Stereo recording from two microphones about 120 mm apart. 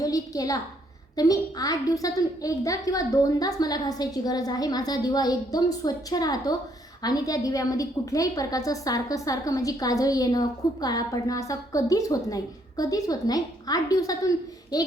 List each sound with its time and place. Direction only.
0.0 s a child's voice: 30° left (ahead or behind)